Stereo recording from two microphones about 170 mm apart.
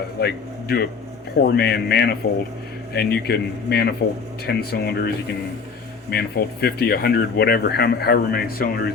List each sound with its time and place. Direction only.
0.2 s speech: 70° left (ahead or behind)